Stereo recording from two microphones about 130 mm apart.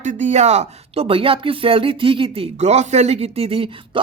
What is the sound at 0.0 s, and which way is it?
Speech, 70° right (ahead or behind).